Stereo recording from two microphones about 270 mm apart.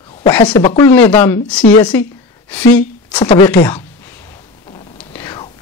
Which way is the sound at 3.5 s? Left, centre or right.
Centre.